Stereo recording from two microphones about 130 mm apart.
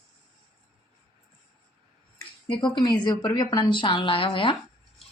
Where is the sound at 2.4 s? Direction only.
40° left (ahead or behind).